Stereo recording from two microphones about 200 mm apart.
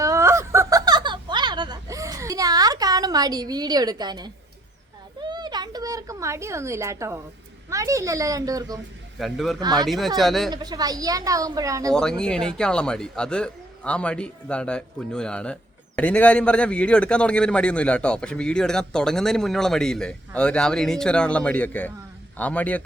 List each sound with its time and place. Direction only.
0.0 s a sound: 15° right (ahead or behind)
7.7 s a woman's voice: 15° right (ahead or behind)
9.1 s a man's voice: centre (ahead or behind)
9.6 s speech: 20° right (ahead or behind)
9.8 s a man's voice: centre (ahead or behind)
10.5 s a woman's voice: 20° right (ahead or behind)
11.9 s a man's voice: 5° left (ahead or behind)